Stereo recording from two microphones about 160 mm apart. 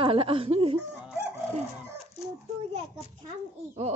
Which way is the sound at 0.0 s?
35° right (ahead or behind).